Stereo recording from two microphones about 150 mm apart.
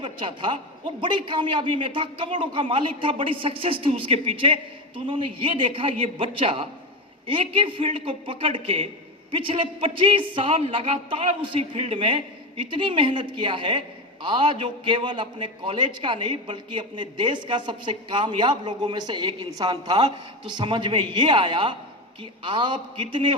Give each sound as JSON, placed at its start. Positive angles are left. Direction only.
{"t": 0.0, "sound": "a man's voice", "side_deg": -35}